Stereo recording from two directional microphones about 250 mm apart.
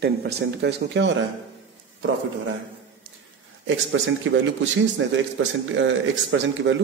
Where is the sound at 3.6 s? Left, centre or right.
Right.